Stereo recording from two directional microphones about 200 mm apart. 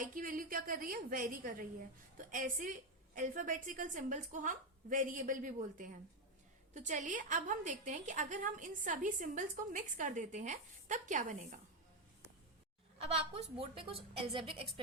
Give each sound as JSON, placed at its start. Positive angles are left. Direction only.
{"t": 0.0, "sound": "a woman's voice", "side_deg": -45}
{"t": 13.0, "sound": "a woman's voice", "side_deg": -30}